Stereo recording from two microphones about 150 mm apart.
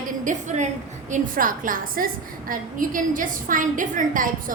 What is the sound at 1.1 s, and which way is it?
A woman's voice, 65° right (ahead or behind).